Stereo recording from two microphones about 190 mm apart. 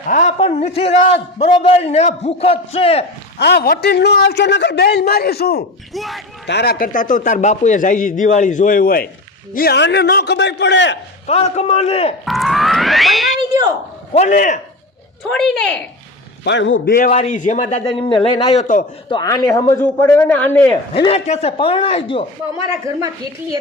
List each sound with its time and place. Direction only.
0.1 s a man's voice: 40° left (ahead or behind)
3.3 s a man's voice: 60° left (ahead or behind)
5.9 s a woman's voice: centre (ahead or behind)
6.5 s a man's voice: 55° left (ahead or behind)
11.3 s a man's voice: 35° left (ahead or behind)
12.2 s speech: centre (ahead or behind)
14.1 s a man's voice: 35° left (ahead or behind)
15.3 s a woman's voice: 5° left (ahead or behind)
16.4 s a man's voice: 70° left (ahead or behind)
16.8 s a man's voice: 45° left (ahead or behind); by 20.7 s 10° left (ahead or behind)
20.9 s a man's voice: 30° left (ahead or behind)